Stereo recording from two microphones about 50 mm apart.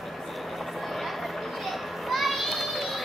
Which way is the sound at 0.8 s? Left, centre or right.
Centre.